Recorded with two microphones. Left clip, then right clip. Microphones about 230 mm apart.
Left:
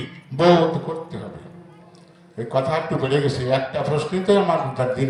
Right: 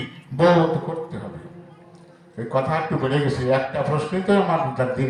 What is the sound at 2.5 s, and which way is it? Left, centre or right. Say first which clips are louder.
A man's voice: left 1 dB; left.